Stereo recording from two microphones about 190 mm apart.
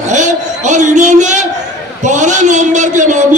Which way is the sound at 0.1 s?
40° right (ahead or behind).